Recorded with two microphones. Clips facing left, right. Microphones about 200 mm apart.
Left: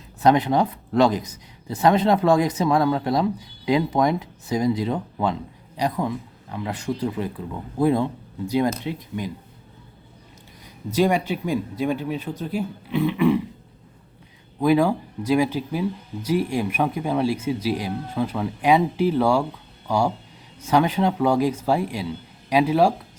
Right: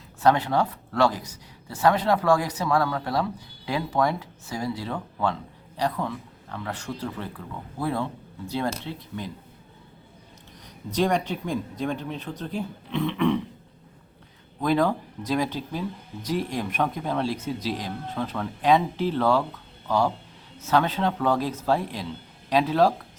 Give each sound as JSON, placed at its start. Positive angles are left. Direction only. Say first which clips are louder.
{"t": 0.2, "sound": "speech", "louder": "left 3 dB", "side_deg": 20}
{"t": 10.9, "sound": "speech", "louder": "left 3 dB", "side_deg": 10}
{"t": 14.6, "sound": "speech", "louder": "left 4 dB", "side_deg": 10}